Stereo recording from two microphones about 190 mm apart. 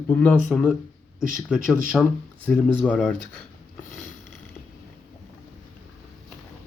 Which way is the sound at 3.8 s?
45° left (ahead or behind).